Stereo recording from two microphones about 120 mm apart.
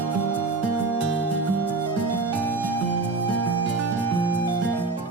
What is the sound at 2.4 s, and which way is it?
Music, 15° left (ahead or behind).